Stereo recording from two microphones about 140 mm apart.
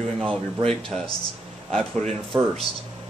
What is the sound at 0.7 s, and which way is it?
Speech, 5° left (ahead or behind).